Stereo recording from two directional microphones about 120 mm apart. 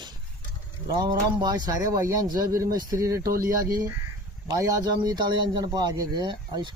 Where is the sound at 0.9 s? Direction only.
35° right (ahead or behind).